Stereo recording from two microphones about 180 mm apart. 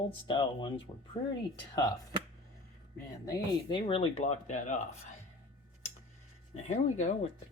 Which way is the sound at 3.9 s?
35° left (ahead or behind).